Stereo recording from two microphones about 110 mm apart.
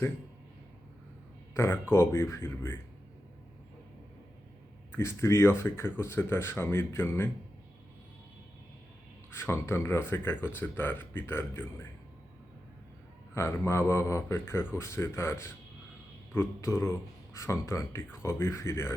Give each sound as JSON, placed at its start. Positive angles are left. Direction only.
{"t": 1.5, "sound": "speech", "side_deg": 25}
{"t": 4.9, "sound": "speech", "side_deg": 25}
{"t": 9.3, "sound": "speech", "side_deg": 25}
{"t": 13.3, "sound": "speech", "side_deg": 25}